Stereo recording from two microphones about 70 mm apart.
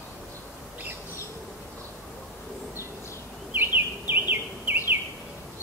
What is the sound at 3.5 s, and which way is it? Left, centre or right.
Bird, right.